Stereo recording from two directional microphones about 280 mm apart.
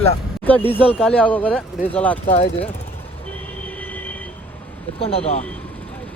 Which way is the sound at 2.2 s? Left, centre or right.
Left.